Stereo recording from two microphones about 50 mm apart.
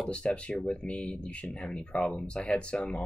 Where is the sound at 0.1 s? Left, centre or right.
Left.